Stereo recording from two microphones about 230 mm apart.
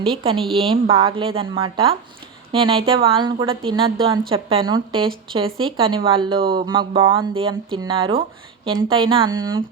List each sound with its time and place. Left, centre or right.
0.2 s speech: right